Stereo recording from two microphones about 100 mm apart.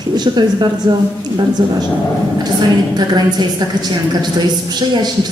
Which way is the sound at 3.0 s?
45° right (ahead or behind).